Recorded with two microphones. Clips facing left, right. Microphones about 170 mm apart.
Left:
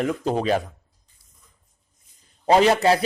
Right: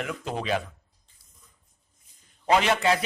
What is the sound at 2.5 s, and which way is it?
Speech, 35° left (ahead or behind).